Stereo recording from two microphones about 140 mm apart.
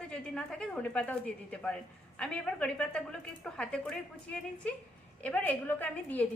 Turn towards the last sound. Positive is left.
turn(degrees=10)  # may be behind; listen again after turning